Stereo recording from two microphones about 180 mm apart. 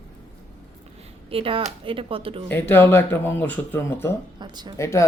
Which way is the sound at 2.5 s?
10° left (ahead or behind).